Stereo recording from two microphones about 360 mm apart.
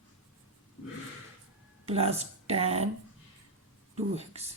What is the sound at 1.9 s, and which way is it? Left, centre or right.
Speech, centre.